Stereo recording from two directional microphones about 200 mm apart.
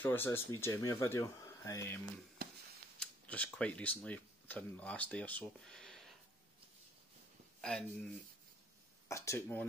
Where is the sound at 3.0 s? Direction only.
5° left (ahead or behind).